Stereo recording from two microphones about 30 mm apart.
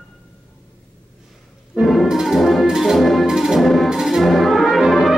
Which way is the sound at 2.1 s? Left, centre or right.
Centre.